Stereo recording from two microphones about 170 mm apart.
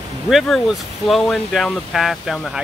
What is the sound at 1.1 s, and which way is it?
Speech, centre (ahead or behind).